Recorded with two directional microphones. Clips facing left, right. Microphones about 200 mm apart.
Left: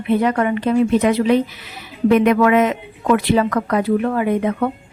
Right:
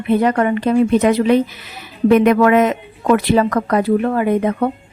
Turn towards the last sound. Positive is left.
turn(degrees=-40)  # may be behind; listen again after turning